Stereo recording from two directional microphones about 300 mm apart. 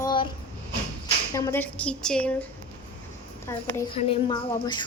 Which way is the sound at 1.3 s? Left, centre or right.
Centre.